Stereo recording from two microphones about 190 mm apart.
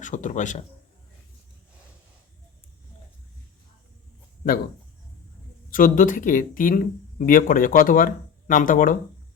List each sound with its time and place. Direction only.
0.0 s speech: 40° left (ahead or behind)
5.7 s speech: 45° left (ahead or behind)